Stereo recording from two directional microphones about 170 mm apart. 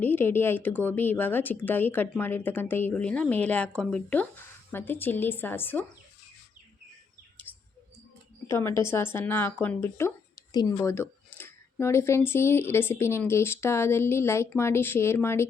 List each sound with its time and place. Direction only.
0.0 s speech: 10° left (ahead or behind)
7.5 s bird: 10° left (ahead or behind)
8.4 s speech: 15° left (ahead or behind)